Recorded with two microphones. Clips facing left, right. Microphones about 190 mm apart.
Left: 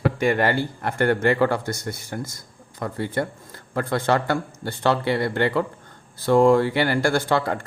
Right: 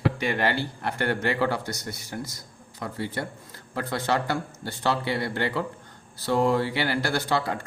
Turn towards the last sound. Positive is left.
turn(degrees=50)  # may be behind; listen again after turning